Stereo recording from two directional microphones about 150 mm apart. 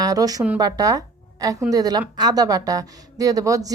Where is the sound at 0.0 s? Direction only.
25° right (ahead or behind).